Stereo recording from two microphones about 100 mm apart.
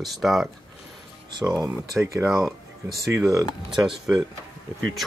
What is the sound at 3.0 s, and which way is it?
Speech, 35° right (ahead or behind).